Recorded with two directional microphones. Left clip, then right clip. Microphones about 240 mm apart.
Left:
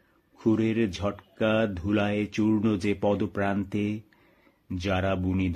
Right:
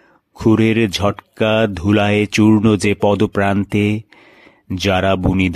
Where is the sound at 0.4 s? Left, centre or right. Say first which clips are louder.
Right 11 dB; right.